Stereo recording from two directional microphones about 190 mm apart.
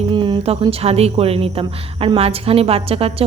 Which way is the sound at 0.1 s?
25° right (ahead or behind).